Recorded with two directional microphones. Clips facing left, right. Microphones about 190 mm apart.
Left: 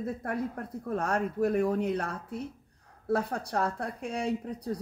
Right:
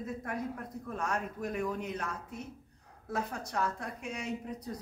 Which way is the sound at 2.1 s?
30° left (ahead or behind).